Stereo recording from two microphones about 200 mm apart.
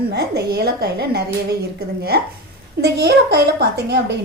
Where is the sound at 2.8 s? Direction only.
55° right (ahead or behind).